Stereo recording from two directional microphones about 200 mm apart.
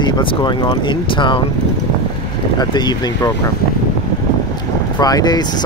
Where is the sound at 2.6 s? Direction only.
20° left (ahead or behind).